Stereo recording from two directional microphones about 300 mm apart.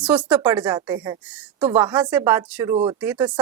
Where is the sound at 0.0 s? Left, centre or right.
Centre.